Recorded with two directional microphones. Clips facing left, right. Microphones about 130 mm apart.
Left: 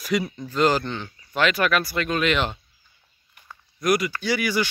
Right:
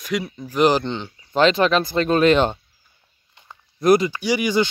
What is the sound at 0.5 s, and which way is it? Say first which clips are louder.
Speech: right 4 dB; 20° right (ahead or behind).